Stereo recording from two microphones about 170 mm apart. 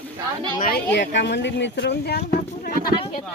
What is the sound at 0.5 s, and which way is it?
Speech, 55° left (ahead or behind).